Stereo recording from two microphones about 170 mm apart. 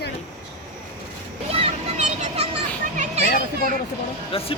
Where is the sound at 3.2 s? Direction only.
55° left (ahead or behind).